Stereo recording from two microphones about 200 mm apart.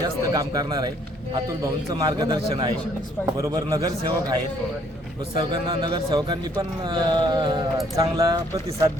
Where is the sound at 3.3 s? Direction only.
15° right (ahead or behind).